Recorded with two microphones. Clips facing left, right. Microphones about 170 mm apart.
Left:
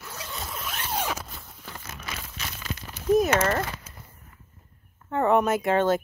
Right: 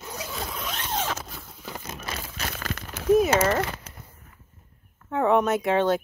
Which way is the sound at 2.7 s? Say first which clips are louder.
Right 4 dB; 90° right.